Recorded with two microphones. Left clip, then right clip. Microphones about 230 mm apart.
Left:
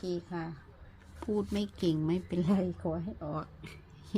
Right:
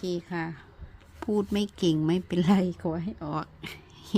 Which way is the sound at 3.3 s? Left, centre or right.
Right.